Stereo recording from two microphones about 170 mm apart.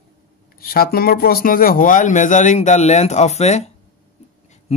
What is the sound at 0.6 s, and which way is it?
Speech, 60° left (ahead or behind).